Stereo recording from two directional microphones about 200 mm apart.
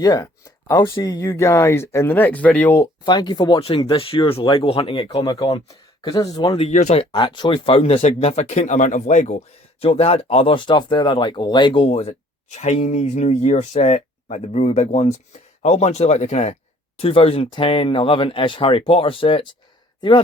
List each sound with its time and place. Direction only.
0.0 s speech: 20° left (ahead or behind)
3.0 s speech: 20° left (ahead or behind)
6.6 s speech: 35° left (ahead or behind)